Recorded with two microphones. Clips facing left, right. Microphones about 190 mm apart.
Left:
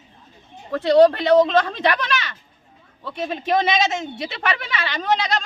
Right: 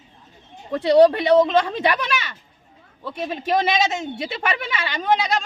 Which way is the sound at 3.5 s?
5° right (ahead or behind).